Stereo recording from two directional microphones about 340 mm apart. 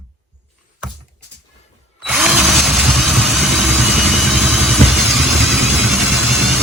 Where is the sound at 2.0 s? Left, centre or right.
Centre.